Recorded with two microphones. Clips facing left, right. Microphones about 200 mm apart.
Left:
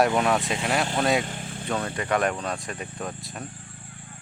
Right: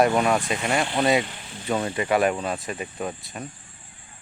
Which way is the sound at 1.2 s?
50° left (ahead or behind).